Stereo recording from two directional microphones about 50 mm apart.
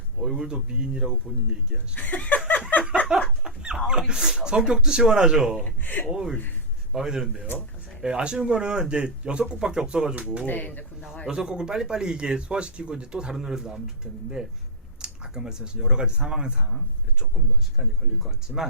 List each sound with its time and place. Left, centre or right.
0.2 s a sound: centre
0.4 s speech: centre
2.0 s speech: left
2.5 s a sound: left
3.4 s chicken: centre
3.8 s speech: centre
5.8 s speech: left
6.1 s speech: centre
10.4 s speech: left
11.3 s speech: centre
17.3 s speech: centre